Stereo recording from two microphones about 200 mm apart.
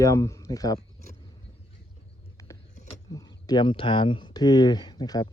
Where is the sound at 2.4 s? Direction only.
15° left (ahead or behind).